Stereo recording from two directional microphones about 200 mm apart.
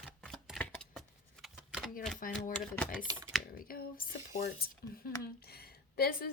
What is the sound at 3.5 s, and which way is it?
Speech, 45° left (ahead or behind).